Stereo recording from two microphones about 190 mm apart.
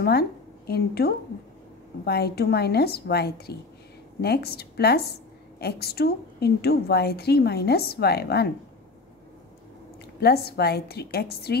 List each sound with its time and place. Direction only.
0.0 s a woman's voice: 55° left (ahead or behind)
10.2 s a woman's voice: 55° left (ahead or behind)